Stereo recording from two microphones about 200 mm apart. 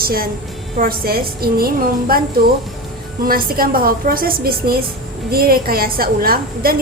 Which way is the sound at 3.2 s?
50° right (ahead or behind).